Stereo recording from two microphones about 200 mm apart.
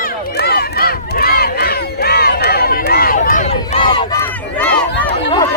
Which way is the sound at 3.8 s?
25° left (ahead or behind).